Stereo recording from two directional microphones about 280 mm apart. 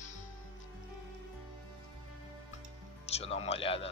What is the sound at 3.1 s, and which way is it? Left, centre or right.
Speech, left.